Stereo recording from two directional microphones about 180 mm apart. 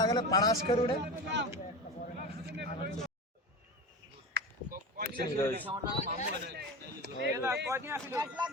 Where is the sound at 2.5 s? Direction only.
70° right (ahead or behind).